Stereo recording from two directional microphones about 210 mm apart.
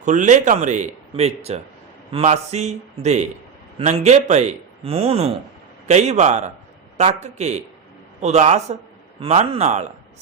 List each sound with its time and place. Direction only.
0.0 s speech: 35° right (ahead or behind)